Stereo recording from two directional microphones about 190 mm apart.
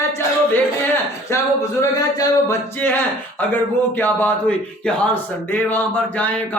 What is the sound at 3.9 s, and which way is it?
A man's voice, 10° left (ahead or behind).